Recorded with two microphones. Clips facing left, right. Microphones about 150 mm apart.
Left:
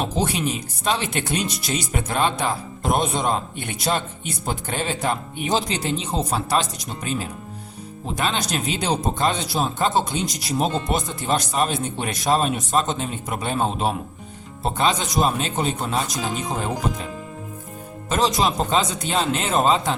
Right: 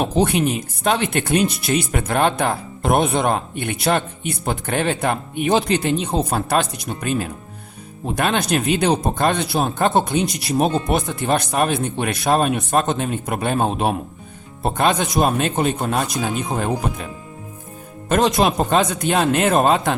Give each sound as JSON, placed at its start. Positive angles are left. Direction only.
{"t": 0.0, "sound": "speech", "side_deg": -60}
{"t": 18.1, "sound": "speech", "side_deg": -55}